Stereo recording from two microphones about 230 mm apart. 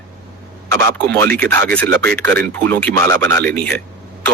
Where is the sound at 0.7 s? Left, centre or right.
Right.